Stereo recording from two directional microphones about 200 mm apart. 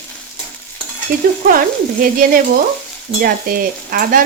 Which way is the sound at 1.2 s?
45° right (ahead or behind).